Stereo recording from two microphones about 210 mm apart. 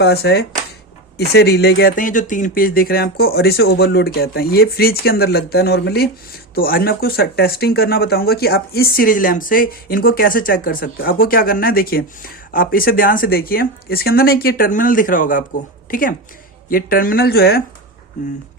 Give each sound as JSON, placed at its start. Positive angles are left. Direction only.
{"t": 0.0, "sound": "speech", "side_deg": 50}